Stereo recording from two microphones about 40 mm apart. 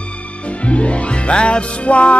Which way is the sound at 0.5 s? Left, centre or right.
Left.